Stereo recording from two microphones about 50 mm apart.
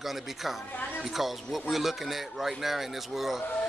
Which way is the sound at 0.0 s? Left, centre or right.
Centre.